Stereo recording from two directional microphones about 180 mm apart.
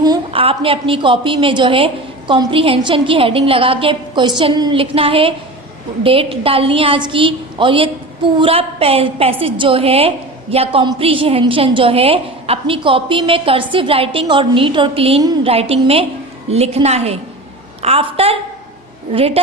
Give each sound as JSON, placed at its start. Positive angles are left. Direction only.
{"t": 0.0, "sound": "a woman's voice", "side_deg": -25}